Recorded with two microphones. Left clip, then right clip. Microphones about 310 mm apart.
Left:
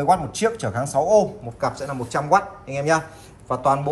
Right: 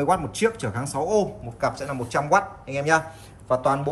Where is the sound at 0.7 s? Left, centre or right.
Centre.